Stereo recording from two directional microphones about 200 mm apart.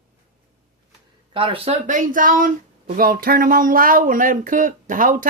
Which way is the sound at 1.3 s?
25° right (ahead or behind).